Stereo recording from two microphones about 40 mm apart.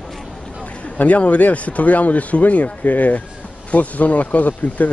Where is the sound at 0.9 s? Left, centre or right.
Left.